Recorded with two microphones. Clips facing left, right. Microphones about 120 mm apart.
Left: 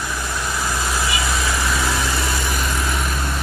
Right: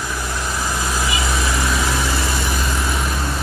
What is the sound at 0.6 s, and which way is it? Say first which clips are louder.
Vehicle: even; 15° right (ahead or behind).